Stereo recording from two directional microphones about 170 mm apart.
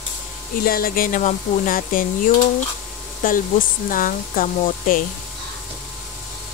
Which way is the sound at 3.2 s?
55° left (ahead or behind).